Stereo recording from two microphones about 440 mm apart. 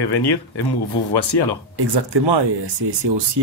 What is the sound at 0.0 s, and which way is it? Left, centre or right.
Speech, left.